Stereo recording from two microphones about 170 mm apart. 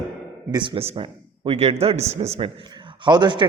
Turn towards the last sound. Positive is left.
turn(degrees=-25)  # may be behind; listen again after turning